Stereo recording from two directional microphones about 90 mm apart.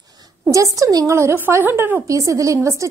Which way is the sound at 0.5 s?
40° right (ahead or behind).